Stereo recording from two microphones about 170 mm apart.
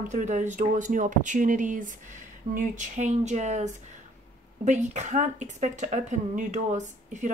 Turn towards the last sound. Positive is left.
turn(degrees=-45)  # may be behind; listen again after turning